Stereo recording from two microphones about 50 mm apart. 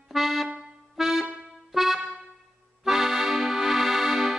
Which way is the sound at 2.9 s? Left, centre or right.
Centre.